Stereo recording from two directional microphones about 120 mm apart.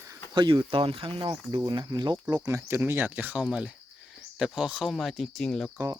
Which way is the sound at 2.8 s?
15° right (ahead or behind).